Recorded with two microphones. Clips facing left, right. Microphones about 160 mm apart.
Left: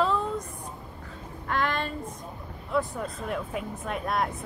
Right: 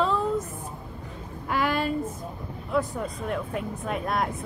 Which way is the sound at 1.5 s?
5° right (ahead or behind).